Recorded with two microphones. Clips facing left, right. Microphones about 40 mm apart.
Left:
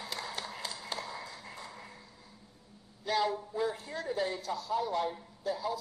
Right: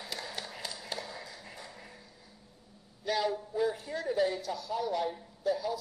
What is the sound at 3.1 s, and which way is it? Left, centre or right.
A man's voice, centre.